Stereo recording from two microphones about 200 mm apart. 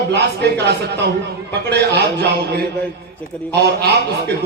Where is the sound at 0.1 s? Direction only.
55° right (ahead or behind).